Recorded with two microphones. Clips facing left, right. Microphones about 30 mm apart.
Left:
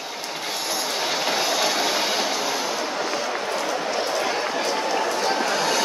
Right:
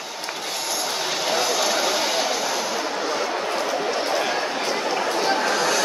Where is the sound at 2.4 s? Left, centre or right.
Centre.